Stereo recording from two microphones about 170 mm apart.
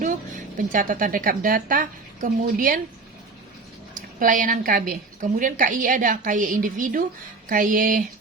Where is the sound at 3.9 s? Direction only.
50° right (ahead or behind).